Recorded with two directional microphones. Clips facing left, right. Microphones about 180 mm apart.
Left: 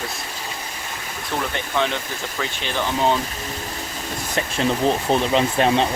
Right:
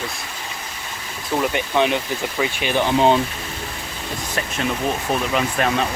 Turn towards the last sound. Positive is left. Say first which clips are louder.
# left 2 dB
turn(degrees=30)  # may be behind; listen again after turning